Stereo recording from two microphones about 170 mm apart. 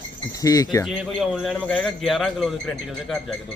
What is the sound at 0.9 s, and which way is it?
A man's voice, centre (ahead or behind).